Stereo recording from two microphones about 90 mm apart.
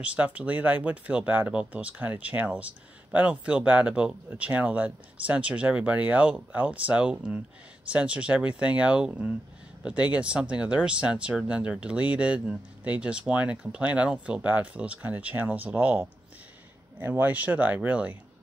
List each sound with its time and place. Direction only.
0.0 s speech: 15° right (ahead or behind)